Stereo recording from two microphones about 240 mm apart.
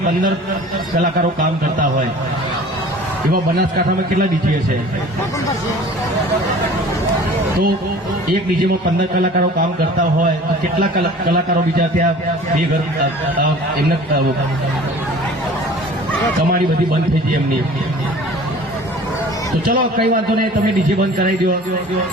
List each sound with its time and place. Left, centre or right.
19.6 s a man's voice: right